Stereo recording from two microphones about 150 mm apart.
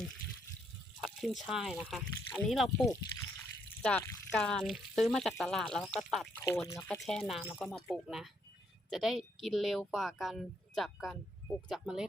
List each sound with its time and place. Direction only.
1.0 s speech: centre (ahead or behind)
3.8 s speech: 15° left (ahead or behind)
4.3 s speech: 5° left (ahead or behind)
6.3 s speech: 15° left (ahead or behind)
6.9 s speech: centre (ahead or behind)